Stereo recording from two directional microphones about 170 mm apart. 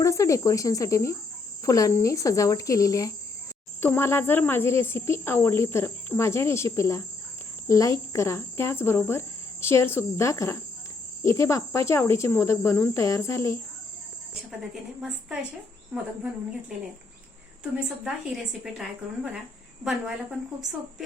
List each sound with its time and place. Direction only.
0.0 s speech: 20° left (ahead or behind)
15.0 s speech: 5° right (ahead or behind)